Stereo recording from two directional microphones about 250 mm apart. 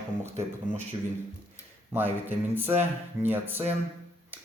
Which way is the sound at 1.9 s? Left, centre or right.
Centre.